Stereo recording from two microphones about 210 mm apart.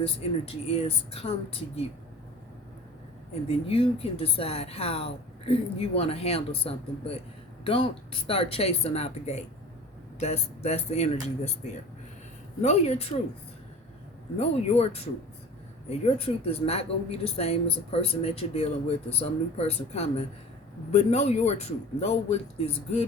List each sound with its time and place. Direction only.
0.0 s speech: 30° left (ahead or behind)
3.7 s speech: 25° left (ahead or behind)
15.9 s speech: 30° left (ahead or behind)